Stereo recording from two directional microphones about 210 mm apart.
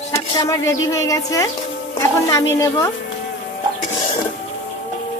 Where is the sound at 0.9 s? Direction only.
15° left (ahead or behind).